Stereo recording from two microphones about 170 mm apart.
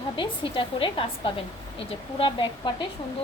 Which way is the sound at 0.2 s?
30° left (ahead or behind).